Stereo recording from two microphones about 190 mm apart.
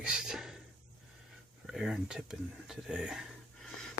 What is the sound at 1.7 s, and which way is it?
Speech, 5° right (ahead or behind).